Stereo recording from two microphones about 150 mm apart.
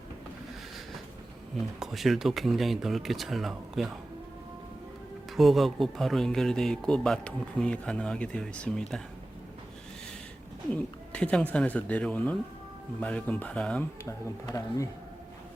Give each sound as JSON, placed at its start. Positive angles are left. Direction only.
{"t": 1.8, "sound": "speech", "side_deg": 0}
{"t": 5.4, "sound": "speech", "side_deg": 0}
{"t": 11.1, "sound": "speech", "side_deg": 5}
{"t": 14.0, "sound": "speech", "side_deg": 20}